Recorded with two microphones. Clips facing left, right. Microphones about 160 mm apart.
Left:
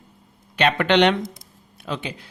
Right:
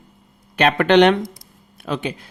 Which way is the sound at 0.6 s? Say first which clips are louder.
Right 4 dB; 45° right (ahead or behind).